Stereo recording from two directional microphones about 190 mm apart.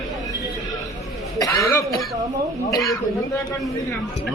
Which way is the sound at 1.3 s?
15° left (ahead or behind).